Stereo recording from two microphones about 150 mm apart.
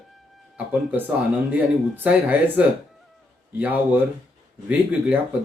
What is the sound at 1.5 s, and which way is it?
Speech, 10° right (ahead or behind).